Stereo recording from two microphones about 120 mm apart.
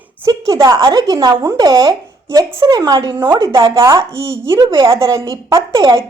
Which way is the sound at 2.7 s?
35° right (ahead or behind).